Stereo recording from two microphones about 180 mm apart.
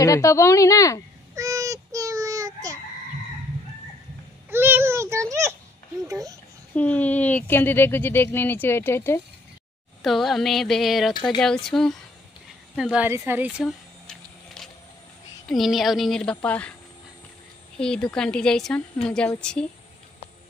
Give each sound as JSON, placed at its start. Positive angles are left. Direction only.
{"t": 0.0, "sound": "speech", "side_deg": 15}
{"t": 1.3, "sound": "a sound", "side_deg": -20}
{"t": 4.5, "sound": "a sound", "side_deg": -10}
{"t": 6.0, "sound": "speech", "side_deg": -20}
{"t": 6.7, "sound": "speech", "side_deg": 10}
{"t": 10.0, "sound": "a woman's voice", "side_deg": 0}
{"t": 12.7, "sound": "a sound", "side_deg": -5}
{"t": 15.4, "sound": "a woman's voice", "side_deg": 0}
{"t": 17.7, "sound": "a woman's voice", "side_deg": 5}